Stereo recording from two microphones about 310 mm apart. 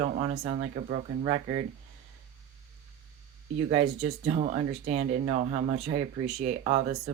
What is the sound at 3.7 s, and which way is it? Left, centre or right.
Speech, right.